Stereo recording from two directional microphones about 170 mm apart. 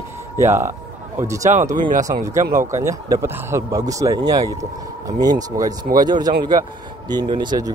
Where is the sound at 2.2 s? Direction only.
15° right (ahead or behind).